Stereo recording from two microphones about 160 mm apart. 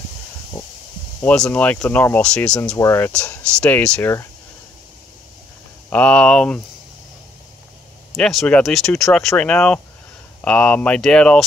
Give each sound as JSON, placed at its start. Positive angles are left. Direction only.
{"t": 1.2, "sound": "speech", "side_deg": 5}
{"t": 2.8, "sound": "speech", "side_deg": 20}
{"t": 3.1, "sound": "speech", "side_deg": 5}
{"t": 5.9, "sound": "speech", "side_deg": 10}
{"t": 8.1, "sound": "speech", "side_deg": 0}